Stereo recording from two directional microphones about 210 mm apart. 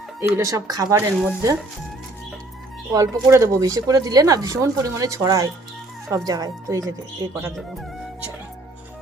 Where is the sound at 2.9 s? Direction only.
15° right (ahead or behind).